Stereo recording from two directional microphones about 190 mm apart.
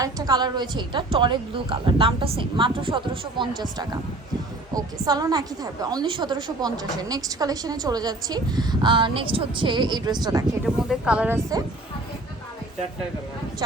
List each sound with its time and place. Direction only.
0.0 s a woman's voice: 20° right (ahead or behind)
10.8 s speech: 5° right (ahead or behind)
13.6 s speech: 20° right (ahead or behind)